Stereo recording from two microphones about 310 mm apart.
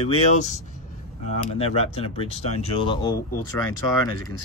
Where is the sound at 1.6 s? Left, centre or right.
Centre.